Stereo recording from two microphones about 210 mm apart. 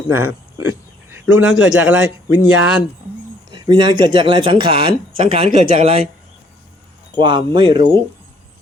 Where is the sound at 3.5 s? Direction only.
20° right (ahead or behind).